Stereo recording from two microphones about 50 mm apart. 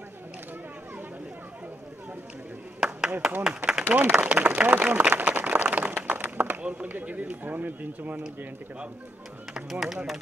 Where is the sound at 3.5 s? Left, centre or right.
Centre.